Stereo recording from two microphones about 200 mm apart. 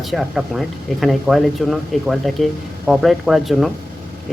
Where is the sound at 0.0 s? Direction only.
Centre (ahead or behind).